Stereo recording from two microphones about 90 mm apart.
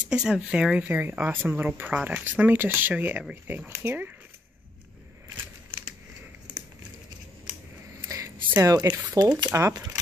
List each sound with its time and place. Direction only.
0.1 s speech: 10° right (ahead or behind)
0.8 s speech: 20° right (ahead or behind)
8.1 s a sound: 40° right (ahead or behind)
9.2 s speech: 40° right (ahead or behind)